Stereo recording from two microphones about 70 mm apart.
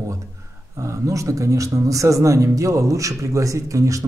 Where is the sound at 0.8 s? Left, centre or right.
Right.